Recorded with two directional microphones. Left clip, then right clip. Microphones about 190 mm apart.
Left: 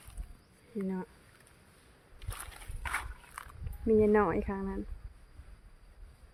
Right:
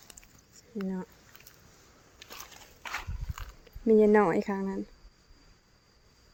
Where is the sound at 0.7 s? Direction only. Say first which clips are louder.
Right 1 dB; 5° left (ahead or behind).